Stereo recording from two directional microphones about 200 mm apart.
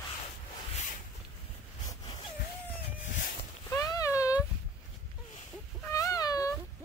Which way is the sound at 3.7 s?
15° left (ahead or behind).